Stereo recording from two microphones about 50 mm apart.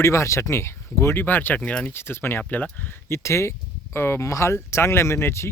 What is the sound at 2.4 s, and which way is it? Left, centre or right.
Speech, left.